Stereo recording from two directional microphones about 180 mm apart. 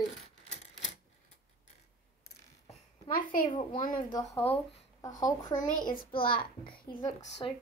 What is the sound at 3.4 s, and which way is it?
Speech, 25° left (ahead or behind).